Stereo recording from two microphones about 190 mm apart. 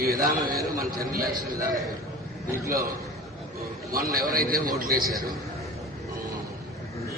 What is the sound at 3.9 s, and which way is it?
A man's voice, 50° right (ahead or behind).